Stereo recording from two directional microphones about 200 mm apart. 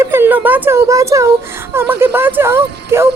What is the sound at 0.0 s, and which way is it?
Speech, 10° right (ahead or behind).